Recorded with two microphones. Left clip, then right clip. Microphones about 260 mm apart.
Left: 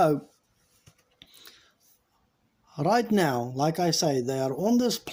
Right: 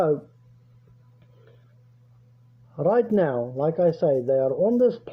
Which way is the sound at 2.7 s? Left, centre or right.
Left.